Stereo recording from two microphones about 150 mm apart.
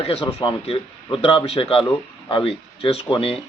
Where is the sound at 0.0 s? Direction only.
40° left (ahead or behind).